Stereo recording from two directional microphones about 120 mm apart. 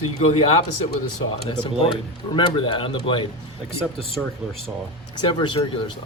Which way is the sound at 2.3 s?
45° left (ahead or behind).